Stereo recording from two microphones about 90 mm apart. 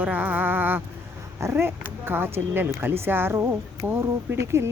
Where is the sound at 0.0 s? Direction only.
15° right (ahead or behind).